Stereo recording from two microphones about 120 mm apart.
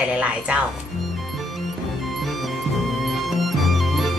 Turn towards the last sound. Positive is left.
turn(degrees=0)  # may be behind; listen again after turning